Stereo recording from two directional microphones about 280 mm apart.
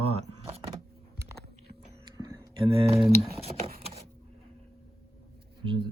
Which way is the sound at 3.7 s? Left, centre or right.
Right.